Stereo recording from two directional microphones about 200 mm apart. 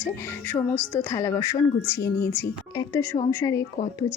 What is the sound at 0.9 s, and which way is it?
Speech, 15° left (ahead or behind).